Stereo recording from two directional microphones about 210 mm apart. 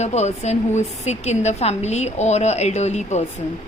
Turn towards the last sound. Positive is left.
turn(degrees=30)  # may be behind; listen again after turning